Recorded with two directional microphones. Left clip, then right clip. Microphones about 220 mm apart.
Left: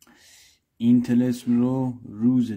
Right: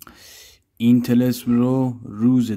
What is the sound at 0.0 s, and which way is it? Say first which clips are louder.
Speech: right 9 dB; 25° right (ahead or behind).